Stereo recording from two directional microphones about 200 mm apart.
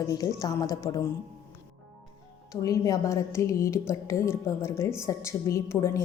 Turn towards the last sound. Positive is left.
turn(degrees=15)  # may be behind; listen again after turning